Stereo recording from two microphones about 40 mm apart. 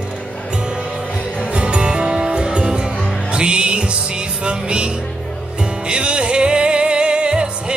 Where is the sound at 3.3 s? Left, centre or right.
Right.